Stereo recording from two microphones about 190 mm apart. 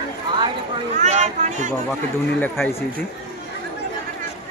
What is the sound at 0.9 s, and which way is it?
Speech, 35° right (ahead or behind).